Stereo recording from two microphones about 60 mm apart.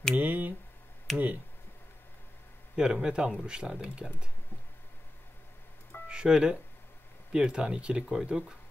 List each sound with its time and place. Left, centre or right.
0.1 s speech: right
2.7 s speech: centre
6.0 s speech: centre